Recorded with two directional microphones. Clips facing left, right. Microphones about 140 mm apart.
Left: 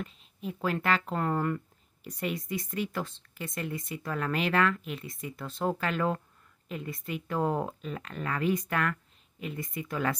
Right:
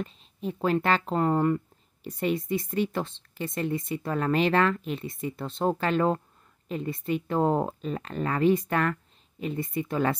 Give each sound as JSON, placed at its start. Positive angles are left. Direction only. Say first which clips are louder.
{"t": 0.0, "sound": "speech", "louder": "right 5 dB", "side_deg": -30}